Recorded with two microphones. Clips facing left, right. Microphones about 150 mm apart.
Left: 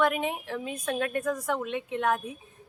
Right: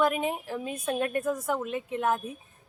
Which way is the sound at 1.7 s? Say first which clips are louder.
Even; 40° right (ahead or behind).